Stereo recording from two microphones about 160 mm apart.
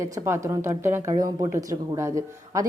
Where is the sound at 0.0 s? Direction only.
20° right (ahead or behind).